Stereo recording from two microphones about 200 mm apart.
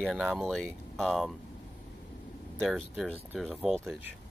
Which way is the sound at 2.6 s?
Centre (ahead or behind).